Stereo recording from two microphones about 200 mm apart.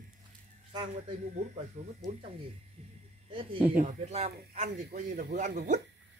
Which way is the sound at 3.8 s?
35° right (ahead or behind).